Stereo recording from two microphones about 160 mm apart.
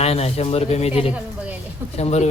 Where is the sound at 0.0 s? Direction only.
40° left (ahead or behind).